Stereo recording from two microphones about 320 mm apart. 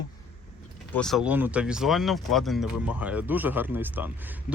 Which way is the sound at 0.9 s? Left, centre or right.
Centre.